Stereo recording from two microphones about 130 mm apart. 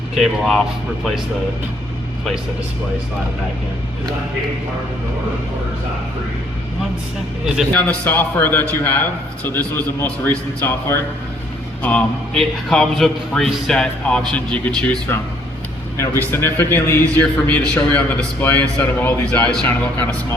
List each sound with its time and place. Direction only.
0.2 s speech: 5° left (ahead or behind)
7.4 s speech: 5° right (ahead or behind)
8.0 s a man's voice: 15° left (ahead or behind)
16.3 s a man's voice: 15° left (ahead or behind)